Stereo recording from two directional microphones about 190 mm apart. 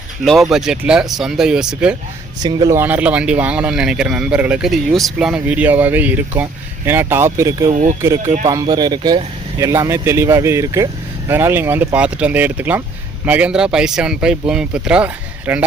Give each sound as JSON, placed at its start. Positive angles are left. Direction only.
{"t": 0.2, "sound": "speech", "side_deg": 0}
{"t": 2.4, "sound": "speech", "side_deg": -20}
{"t": 7.7, "sound": "speech", "side_deg": -40}
{"t": 8.0, "sound": "speech", "side_deg": -15}